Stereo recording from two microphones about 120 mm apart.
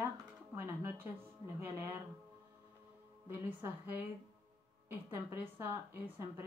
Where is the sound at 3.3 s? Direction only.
15° right (ahead or behind).